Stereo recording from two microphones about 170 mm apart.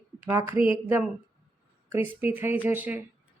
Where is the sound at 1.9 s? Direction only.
15° right (ahead or behind).